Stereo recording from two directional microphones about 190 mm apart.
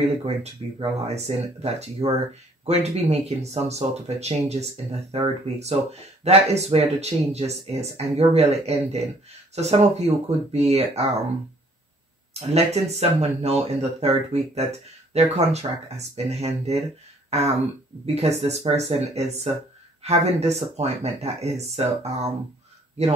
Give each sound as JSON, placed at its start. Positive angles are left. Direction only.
{"t": 0.0, "sound": "speech", "side_deg": -30}
{"t": 12.4, "sound": "speech", "side_deg": -35}
{"t": 17.3, "sound": "a sound", "side_deg": -35}
{"t": 18.0, "sound": "speech", "side_deg": -35}